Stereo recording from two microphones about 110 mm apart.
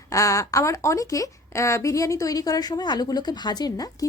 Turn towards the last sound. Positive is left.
turn(degrees=35)  # may be behind; listen again after turning